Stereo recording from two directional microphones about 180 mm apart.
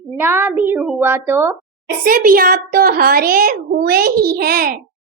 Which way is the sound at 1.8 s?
50° right (ahead or behind).